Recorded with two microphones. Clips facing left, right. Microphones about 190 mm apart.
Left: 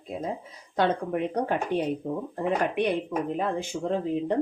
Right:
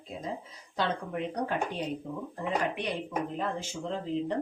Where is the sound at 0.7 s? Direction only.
55° left (ahead or behind).